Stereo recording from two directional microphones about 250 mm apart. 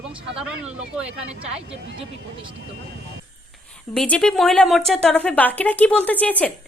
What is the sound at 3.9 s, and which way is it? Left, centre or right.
Speech, centre.